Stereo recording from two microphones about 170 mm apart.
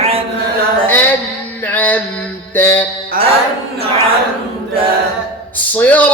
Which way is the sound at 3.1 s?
60° right (ahead or behind).